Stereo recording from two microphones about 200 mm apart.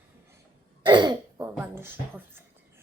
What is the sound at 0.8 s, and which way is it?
Throat clearing, 25° right (ahead or behind).